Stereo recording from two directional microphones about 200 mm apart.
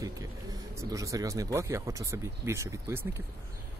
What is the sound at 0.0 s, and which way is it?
Speech, 15° right (ahead or behind).